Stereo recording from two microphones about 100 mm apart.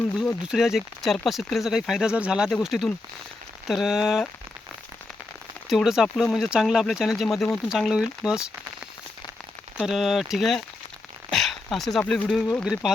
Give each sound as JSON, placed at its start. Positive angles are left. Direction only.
{"t": 0.4, "sound": "speech", "side_deg": -5}
{"t": 5.6, "sound": "speech", "side_deg": 0}
{"t": 7.7, "sound": "speech", "side_deg": -5}
{"t": 9.8, "sound": "speech", "side_deg": -5}